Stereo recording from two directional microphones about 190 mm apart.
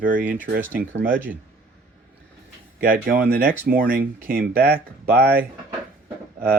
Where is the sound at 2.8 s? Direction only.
50° right (ahead or behind).